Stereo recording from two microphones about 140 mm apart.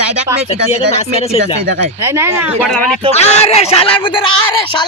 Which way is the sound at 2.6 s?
5° left (ahead or behind).